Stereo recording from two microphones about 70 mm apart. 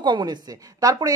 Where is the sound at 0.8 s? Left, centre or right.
Right.